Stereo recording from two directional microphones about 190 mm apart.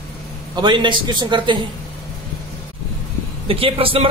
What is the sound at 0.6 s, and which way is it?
A woman's voice, 25° right (ahead or behind).